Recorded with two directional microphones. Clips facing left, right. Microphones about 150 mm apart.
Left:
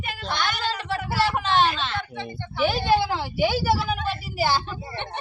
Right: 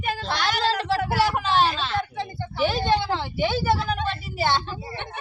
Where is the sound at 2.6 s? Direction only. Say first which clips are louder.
Left 1 dB; centre (ahead or behind).